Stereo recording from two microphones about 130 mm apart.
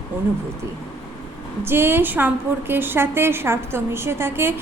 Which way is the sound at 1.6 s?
15° right (ahead or behind).